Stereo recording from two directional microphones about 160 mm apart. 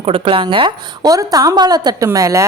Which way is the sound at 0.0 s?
35° right (ahead or behind).